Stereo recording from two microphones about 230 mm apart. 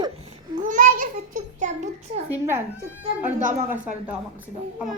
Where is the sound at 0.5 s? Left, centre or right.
Right.